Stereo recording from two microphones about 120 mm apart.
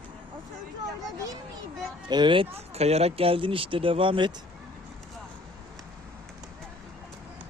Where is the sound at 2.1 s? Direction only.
40° right (ahead or behind).